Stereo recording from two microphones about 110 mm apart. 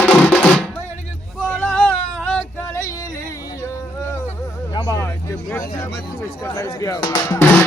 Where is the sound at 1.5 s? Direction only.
10° left (ahead or behind).